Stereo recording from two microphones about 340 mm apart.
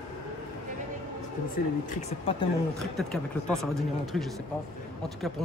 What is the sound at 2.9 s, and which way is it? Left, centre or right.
Speech, centre.